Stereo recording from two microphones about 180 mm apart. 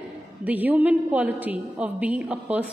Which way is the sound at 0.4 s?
10° right (ahead or behind).